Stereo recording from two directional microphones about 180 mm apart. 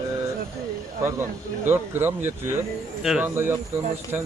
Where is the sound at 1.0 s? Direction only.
15° right (ahead or behind).